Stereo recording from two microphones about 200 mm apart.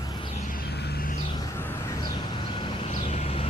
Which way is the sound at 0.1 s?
25° left (ahead or behind).